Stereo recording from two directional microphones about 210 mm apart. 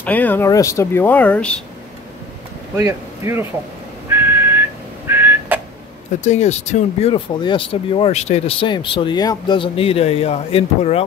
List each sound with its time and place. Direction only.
0.0 s speech: 10° left (ahead or behind)
2.7 s speech: 10° right (ahead or behind)
4.1 s whistling: 10° right (ahead or behind)
6.2 s speech: 35° left (ahead or behind)